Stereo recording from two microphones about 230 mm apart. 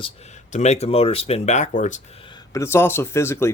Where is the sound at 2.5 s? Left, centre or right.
Centre.